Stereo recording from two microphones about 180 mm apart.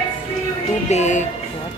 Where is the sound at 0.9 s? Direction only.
40° left (ahead or behind).